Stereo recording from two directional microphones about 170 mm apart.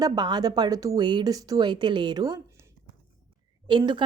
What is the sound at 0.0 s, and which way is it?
A woman's voice, 25° right (ahead or behind).